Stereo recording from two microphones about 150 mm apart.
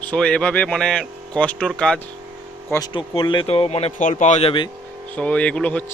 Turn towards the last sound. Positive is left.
turn(degrees=10)  # may be behind; listen again after turning